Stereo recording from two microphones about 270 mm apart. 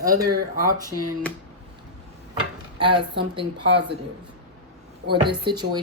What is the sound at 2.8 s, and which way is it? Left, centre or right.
Speech, centre.